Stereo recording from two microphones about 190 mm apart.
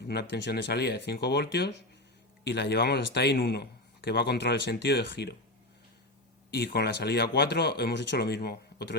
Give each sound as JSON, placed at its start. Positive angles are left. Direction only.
{"t": 0.1, "sound": "a man's voice", "side_deg": 65}
{"t": 6.5, "sound": "a man's voice", "side_deg": 60}